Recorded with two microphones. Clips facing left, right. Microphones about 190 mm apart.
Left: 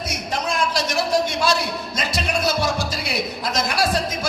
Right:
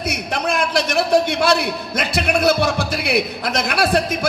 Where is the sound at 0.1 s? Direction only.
60° right (ahead or behind).